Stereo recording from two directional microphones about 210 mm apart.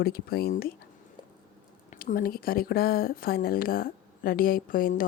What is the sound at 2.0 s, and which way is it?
Speech, 45° left (ahead or behind).